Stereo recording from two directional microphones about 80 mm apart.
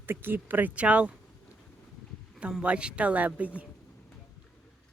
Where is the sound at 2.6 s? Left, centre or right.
Centre.